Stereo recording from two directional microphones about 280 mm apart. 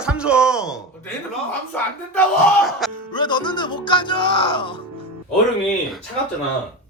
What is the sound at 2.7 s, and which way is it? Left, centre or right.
Music, centre.